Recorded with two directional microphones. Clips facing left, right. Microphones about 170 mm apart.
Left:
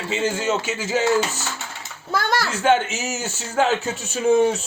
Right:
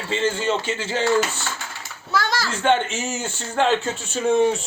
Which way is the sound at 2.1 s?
55° left (ahead or behind).